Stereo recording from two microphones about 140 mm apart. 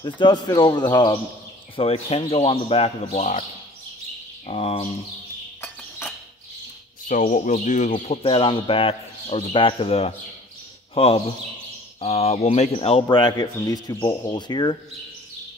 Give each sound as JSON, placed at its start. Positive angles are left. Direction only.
{"t": 0.0, "sound": "speech", "side_deg": 30}
{"t": 1.8, "sound": "a man's voice", "side_deg": 45}
{"t": 4.5, "sound": "a man's voice", "side_deg": 45}
{"t": 7.1, "sound": "speech", "side_deg": 75}
{"t": 8.2, "sound": "a man's voice", "side_deg": 40}